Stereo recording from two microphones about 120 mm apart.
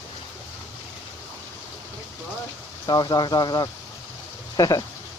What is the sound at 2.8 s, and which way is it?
Speech, 35° left (ahead or behind).